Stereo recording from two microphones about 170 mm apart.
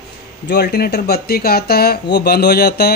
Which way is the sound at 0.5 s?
75° left (ahead or behind).